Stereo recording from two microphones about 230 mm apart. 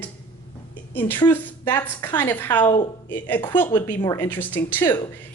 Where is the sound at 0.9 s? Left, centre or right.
Centre.